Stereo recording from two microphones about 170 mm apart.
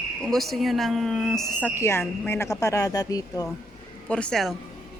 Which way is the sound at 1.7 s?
15° left (ahead or behind).